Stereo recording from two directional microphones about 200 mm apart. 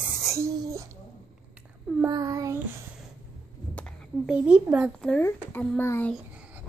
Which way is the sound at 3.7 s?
Centre (ahead or behind).